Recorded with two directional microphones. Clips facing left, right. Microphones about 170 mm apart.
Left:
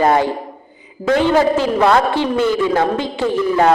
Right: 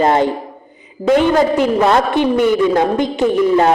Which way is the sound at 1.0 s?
45° right (ahead or behind).